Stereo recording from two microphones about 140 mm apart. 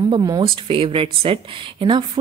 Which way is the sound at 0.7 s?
40° right (ahead or behind).